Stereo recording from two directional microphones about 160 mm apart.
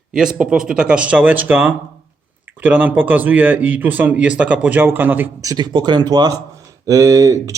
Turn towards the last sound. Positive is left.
turn(degrees=-20)  # may be behind; listen again after turning